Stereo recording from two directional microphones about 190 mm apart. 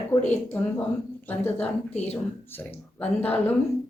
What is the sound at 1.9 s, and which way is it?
Speech, 35° left (ahead or behind).